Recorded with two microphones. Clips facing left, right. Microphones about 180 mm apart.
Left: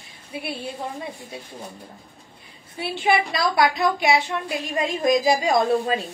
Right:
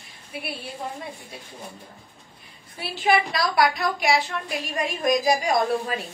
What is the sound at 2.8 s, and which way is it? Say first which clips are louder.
A woman's voice: left 1 dB; 25° left (ahead or behind).